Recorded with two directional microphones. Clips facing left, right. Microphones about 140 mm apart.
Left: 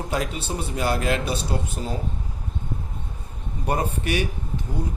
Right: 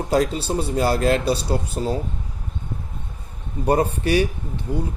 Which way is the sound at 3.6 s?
35° right (ahead or behind).